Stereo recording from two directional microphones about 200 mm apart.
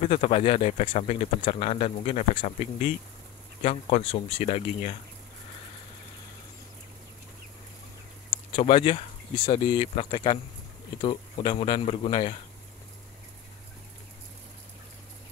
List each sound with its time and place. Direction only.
0.0 s speech: 30° left (ahead or behind)
8.5 s speech: 25° left (ahead or behind)